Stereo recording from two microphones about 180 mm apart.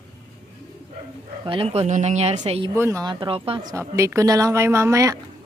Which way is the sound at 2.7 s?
15° right (ahead or behind).